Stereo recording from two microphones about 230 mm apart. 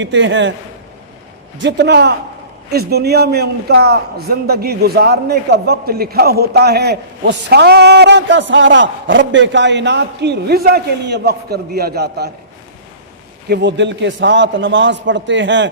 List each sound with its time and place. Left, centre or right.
0.0 s a man's voice: right
1.6 s a man's voice: right
13.5 s a man's voice: right